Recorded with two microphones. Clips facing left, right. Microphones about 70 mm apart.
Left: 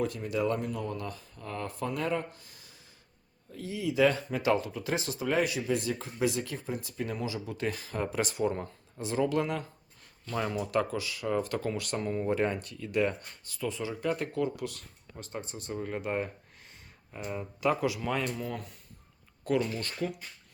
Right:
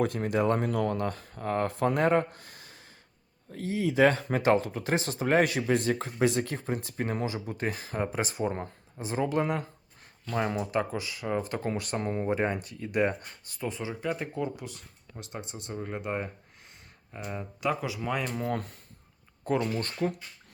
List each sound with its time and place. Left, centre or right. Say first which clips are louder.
0.0 s speech: right 4 dB; right
0.7 s speech: right 7 dB; right
3.5 s speech: right 4 dB; right
14.0 s speech: left 2 dB; centre
18.3 s speech: right 5 dB; right
19.5 s speech: right 1 dB; right